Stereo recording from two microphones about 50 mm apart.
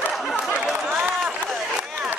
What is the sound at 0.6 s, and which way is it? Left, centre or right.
Chatter, right.